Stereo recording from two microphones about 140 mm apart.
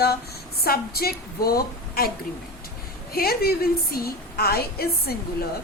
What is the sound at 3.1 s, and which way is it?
A woman's voice, 90° left.